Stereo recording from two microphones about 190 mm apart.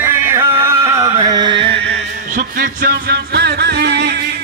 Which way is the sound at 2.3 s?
45° right (ahead or behind).